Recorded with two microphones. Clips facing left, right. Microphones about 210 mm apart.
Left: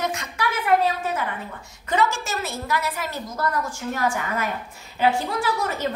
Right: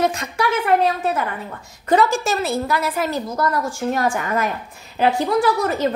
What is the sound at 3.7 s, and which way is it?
Speech, 30° right (ahead or behind).